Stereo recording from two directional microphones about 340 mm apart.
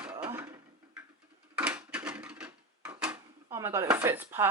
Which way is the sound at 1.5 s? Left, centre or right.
Centre.